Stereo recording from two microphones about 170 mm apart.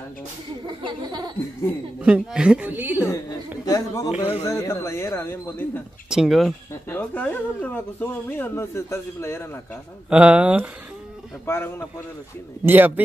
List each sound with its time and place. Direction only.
0.7 s a sound: 25° right (ahead or behind)
2.0 s a woman's voice: 10° right (ahead or behind)
3.6 s a man's voice: 20° left (ahead or behind)
4.2 s speech: 35° left (ahead or behind)
4.5 s speech: 15° left (ahead or behind)
6.0 s speech: 5° right (ahead or behind)
6.9 s speech: 10° left (ahead or behind)
10.0 s a woman's voice: 5° right (ahead or behind)
11.4 s speech: 15° left (ahead or behind)
12.6 s a woman's voice: 10° right (ahead or behind)